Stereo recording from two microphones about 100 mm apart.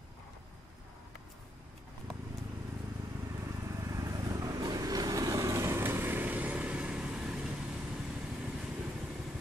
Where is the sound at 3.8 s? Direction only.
35° right (ahead or behind); by 7.4 s 10° right (ahead or behind).